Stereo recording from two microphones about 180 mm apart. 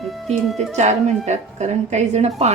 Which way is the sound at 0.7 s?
40° right (ahead or behind).